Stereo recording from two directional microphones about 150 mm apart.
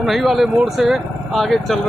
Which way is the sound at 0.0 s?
Centre (ahead or behind).